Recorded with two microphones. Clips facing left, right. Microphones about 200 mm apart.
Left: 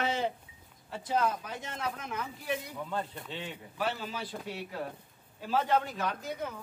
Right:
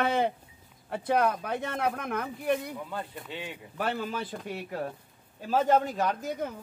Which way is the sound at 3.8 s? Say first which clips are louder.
Right 4 dB; 55° right (ahead or behind).